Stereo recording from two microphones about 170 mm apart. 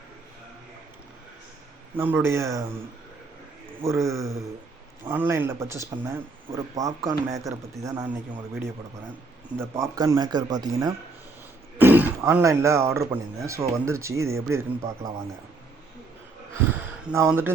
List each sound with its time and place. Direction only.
2.0 s speech: 15° right (ahead or behind)
3.8 s speech: 15° right (ahead or behind)
11.8 s speech: 10° right (ahead or behind)
17.1 s speech: 10° right (ahead or behind)